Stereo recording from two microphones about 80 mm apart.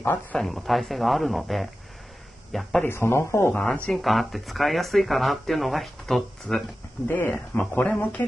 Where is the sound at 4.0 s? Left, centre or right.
Centre.